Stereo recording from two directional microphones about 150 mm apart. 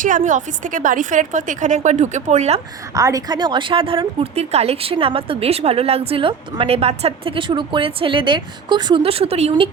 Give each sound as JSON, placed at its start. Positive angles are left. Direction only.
{"t": 0.0, "sound": "a woman's voice", "side_deg": -55}
{"t": 2.9, "sound": "a woman's voice", "side_deg": -20}